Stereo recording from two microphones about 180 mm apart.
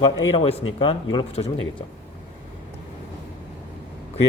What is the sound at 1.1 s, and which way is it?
Speech, 35° left (ahead or behind).